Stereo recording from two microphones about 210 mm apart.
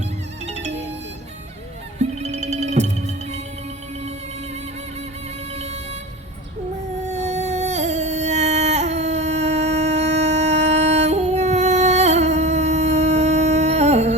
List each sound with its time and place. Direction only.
0.4 s music: 30° right (ahead or behind)
2.0 s music: 35° right (ahead or behind)
5.5 s vehicle: 30° right (ahead or behind)
7.0 s a sound: 35° right (ahead or behind)